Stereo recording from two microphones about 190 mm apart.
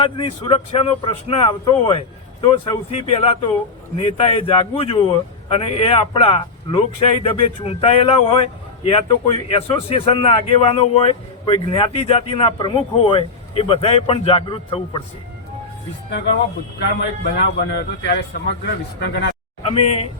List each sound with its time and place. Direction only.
0.0 s a man's voice: 25° left (ahead or behind)
17.0 s a man's voice: 65° left (ahead or behind)
19.6 s speech: 30° left (ahead or behind)